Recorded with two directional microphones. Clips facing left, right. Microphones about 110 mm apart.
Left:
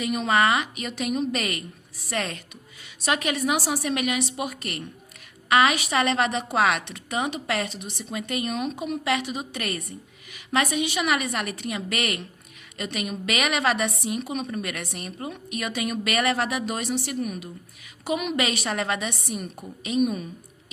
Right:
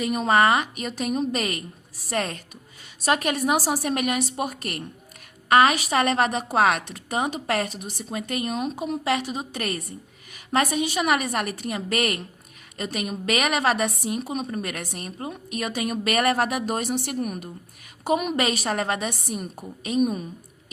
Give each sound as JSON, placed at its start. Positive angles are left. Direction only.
{"t": 0.0, "sound": "a woman's voice", "side_deg": -40}